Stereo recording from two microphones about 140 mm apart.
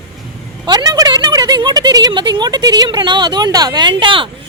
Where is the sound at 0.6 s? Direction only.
30° right (ahead or behind).